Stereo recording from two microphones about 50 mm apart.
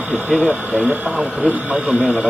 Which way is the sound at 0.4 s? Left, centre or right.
Right.